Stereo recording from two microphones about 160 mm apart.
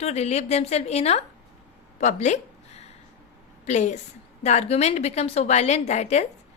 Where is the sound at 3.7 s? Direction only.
50° left (ahead or behind).